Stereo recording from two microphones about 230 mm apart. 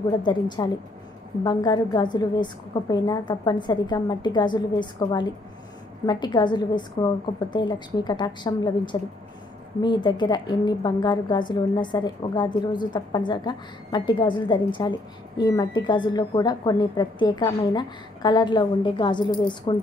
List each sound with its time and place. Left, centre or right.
0.2 s a woman's voice: centre